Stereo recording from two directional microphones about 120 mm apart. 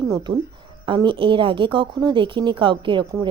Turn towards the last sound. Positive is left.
turn(degrees=-40)  # may be behind; listen again after turning